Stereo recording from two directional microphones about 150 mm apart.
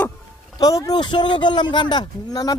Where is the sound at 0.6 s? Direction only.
25° left (ahead or behind).